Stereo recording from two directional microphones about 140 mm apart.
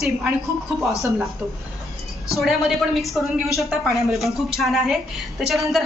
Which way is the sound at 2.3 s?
Centre (ahead or behind).